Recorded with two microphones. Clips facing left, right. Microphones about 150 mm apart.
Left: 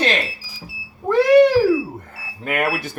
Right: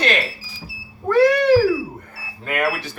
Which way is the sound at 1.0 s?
20° left (ahead or behind).